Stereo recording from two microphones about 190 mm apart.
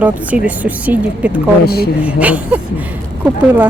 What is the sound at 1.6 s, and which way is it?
Speech, 55° left (ahead or behind).